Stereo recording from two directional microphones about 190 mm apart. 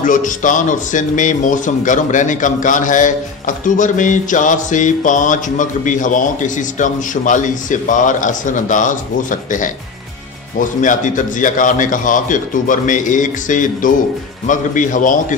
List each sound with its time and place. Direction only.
0.0 s a man's voice: 45° left (ahead or behind)
10.8 s a man's voice: 45° left (ahead or behind)